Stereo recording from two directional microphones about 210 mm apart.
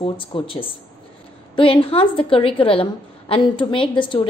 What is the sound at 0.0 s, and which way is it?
A woman's voice, 25° left (ahead or behind).